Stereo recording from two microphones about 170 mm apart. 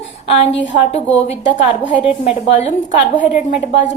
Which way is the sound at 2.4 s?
35° left (ahead or behind).